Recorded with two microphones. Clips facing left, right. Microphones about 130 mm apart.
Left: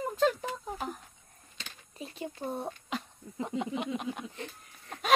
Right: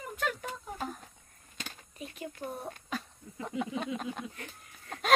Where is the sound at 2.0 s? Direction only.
30° left (ahead or behind).